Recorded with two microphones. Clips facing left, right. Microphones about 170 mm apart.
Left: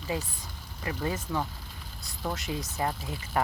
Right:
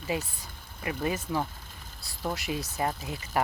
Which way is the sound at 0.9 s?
10° right (ahead or behind).